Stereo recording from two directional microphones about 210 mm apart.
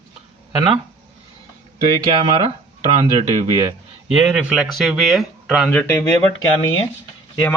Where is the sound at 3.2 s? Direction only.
35° right (ahead or behind).